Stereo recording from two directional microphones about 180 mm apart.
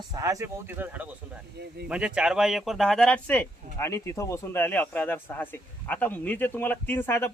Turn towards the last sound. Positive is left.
turn(degrees=15)  # may be behind; listen again after turning